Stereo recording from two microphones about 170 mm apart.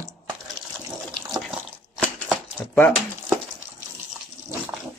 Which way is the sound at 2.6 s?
10° left (ahead or behind).